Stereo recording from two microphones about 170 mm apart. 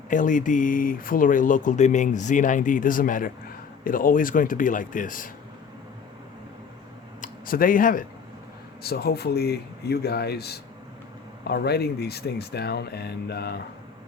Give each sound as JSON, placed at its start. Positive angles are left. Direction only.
{"t": 0.1, "sound": "speech", "side_deg": 50}
{"t": 7.2, "sound": "a sound", "side_deg": 55}
{"t": 8.8, "sound": "speech", "side_deg": 65}